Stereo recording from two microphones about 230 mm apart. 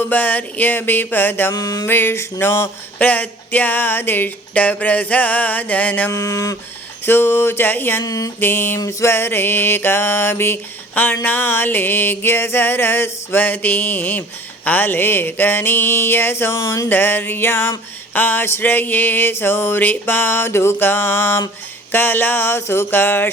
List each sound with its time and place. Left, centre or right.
0.0 s mantra: centre